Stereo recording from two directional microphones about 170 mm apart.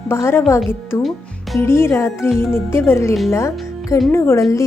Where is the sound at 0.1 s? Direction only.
15° left (ahead or behind).